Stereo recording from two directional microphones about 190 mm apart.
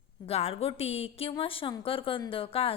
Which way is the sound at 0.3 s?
30° left (ahead or behind).